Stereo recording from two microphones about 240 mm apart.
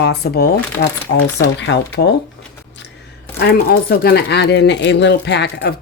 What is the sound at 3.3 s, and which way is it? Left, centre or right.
Speech, left.